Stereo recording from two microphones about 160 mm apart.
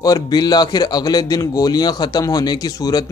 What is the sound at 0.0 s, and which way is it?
Speech, 25° left (ahead or behind).